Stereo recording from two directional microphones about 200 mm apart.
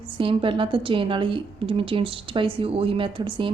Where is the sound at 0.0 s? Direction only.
25° right (ahead or behind).